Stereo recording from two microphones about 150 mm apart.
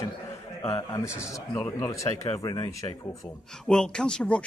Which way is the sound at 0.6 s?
20° left (ahead or behind).